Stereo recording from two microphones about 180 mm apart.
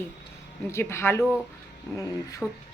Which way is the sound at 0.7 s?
15° left (ahead or behind).